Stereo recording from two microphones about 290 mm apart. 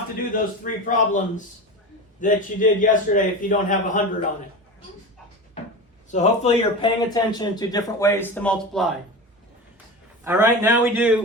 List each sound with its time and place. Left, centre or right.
0.3 s a man's voice: left
6.1 s speech: left; by 8.9 s centre
10.2 s a man's voice: centre